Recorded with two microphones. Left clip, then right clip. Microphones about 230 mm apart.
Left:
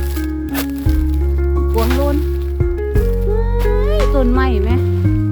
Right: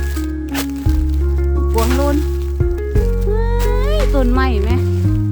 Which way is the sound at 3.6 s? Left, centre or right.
Centre.